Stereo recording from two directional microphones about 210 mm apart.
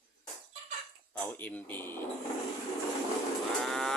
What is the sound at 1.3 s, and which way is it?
Speech, 10° left (ahead or behind).